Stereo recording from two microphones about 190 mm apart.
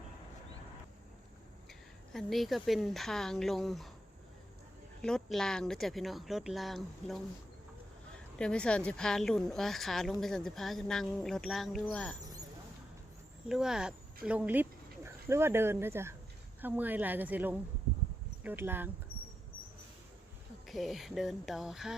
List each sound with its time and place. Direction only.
2.1 s a woman's voice: centre (ahead or behind)
5.0 s a woman's voice: 5° left (ahead or behind)
8.4 s a woman's voice: 5° left (ahead or behind)
13.5 s a woman's voice: 5° right (ahead or behind)
20.7 s a woman's voice: centre (ahead or behind)